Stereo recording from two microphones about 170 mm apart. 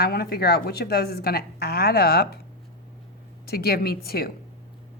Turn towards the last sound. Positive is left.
turn(degrees=65)  # may be behind; listen again after turning